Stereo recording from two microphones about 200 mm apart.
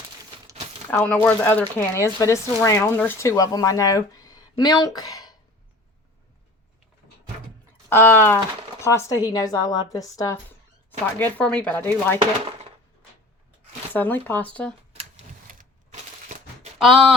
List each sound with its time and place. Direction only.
0.9 s speech: 10° left (ahead or behind)
7.9 s a woman's voice: 10° left (ahead or behind)
11.0 s speech: 5° left (ahead or behind)
13.9 s speech: 10° left (ahead or behind)
14.9 s typewriter: 40° right (ahead or behind)